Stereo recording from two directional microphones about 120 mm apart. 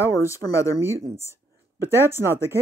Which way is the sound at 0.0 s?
25° left (ahead or behind).